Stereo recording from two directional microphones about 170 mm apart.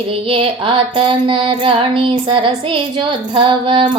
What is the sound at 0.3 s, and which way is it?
Music, 30° right (ahead or behind).